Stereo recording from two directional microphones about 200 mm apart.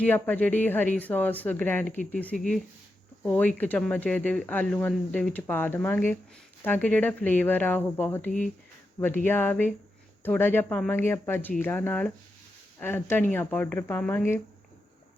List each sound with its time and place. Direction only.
0.0 s speech: 10° left (ahead or behind)